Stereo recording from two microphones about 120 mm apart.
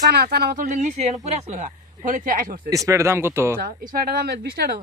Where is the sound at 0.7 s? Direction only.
85° right.